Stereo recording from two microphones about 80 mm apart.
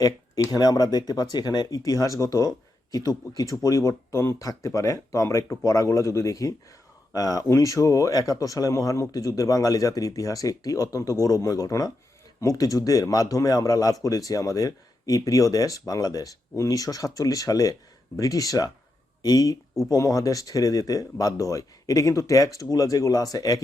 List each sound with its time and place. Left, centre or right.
0.4 s speech: left